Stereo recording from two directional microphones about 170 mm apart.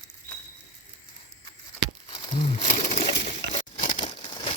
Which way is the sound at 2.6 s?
40° left (ahead or behind).